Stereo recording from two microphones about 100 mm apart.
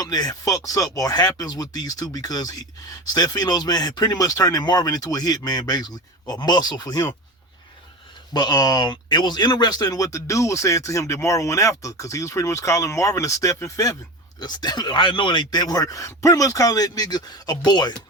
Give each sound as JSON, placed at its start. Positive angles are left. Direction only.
{"t": 0.0, "sound": "speech", "side_deg": 40}
{"t": 8.3, "sound": "speech", "side_deg": 45}
{"t": 14.3, "sound": "speech", "side_deg": 45}